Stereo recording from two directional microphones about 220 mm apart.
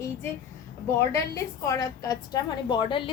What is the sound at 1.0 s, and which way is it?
A woman's voice, 15° left (ahead or behind).